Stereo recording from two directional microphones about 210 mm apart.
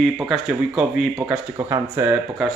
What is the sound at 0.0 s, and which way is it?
Speech, 5° right (ahead or behind).